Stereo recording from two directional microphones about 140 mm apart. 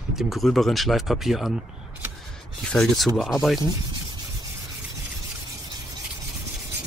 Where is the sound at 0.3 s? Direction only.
5° left (ahead or behind).